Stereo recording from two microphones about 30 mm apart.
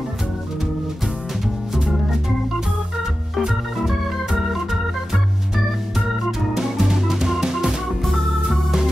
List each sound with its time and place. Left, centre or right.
3.3 s organ: centre
6.5 s music: centre
8.0 s organ: centre